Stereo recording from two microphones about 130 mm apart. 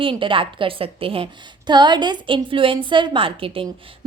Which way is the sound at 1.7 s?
35° right (ahead or behind).